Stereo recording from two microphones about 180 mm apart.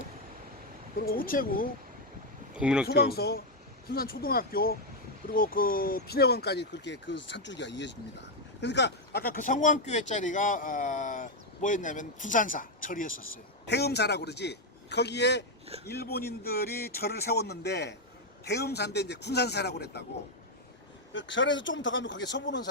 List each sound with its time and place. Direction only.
0.9 s speech: 55° left (ahead or behind)
2.6 s speech: 5° right (ahead or behind)
2.8 s speech: 60° left (ahead or behind)
13.7 s speech: 65° left (ahead or behind)
21.1 s speech: 90° left